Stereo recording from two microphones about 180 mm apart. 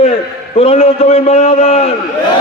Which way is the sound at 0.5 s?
35° left (ahead or behind).